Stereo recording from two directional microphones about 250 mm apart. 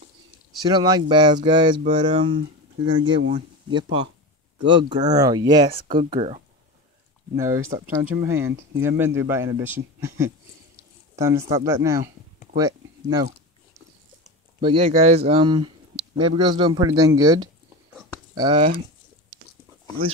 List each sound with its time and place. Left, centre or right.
0.6 s a man's voice: centre
7.3 s a man's voice: centre
12.5 s a sound: centre
14.6 s a man's voice: right